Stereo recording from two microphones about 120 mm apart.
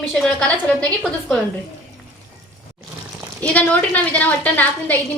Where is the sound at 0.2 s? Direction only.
5° left (ahead or behind).